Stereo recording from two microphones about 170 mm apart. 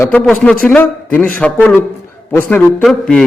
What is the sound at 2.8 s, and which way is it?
Speech, centre (ahead or behind).